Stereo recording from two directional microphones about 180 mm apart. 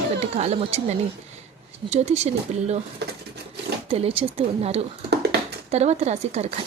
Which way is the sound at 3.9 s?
30° right (ahead or behind).